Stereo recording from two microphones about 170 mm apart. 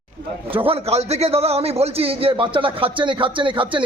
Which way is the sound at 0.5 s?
35° right (ahead or behind).